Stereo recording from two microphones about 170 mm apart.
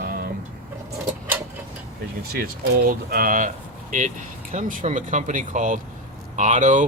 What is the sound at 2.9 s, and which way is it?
Speech, 55° right (ahead or behind).